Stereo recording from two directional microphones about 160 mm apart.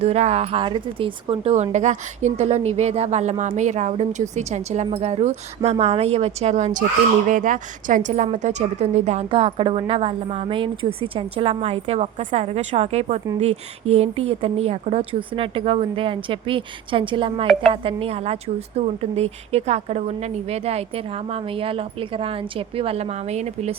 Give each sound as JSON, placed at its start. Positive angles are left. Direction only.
{"t": 0.0, "sound": "speech", "side_deg": -40}
{"t": 7.3, "sound": "a woman's voice", "side_deg": -55}